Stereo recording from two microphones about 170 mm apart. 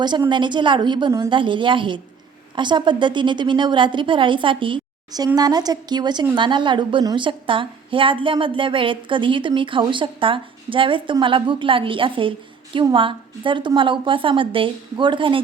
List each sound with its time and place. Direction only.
0.0 s a woman's voice: 25° right (ahead or behind)